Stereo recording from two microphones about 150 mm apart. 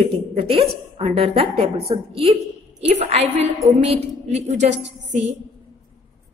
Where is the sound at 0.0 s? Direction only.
40° right (ahead or behind).